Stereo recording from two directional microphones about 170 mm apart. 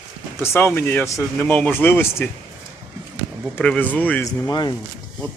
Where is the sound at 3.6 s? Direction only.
10° left (ahead or behind).